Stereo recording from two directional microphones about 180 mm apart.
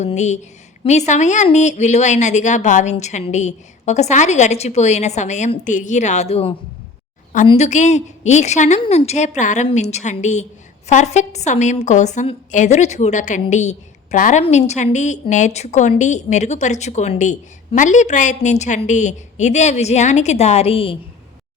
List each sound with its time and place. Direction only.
0.0 s a woman's voice: 40° left (ahead or behind)